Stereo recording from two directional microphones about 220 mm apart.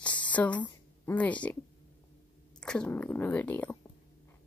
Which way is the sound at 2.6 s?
5° left (ahead or behind).